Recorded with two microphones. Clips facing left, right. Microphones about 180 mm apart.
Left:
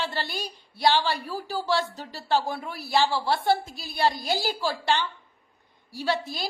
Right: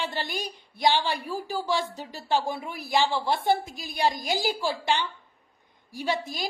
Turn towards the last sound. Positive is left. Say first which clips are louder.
# left 1 dB
turn(degrees=-15)  # may be behind; listen again after turning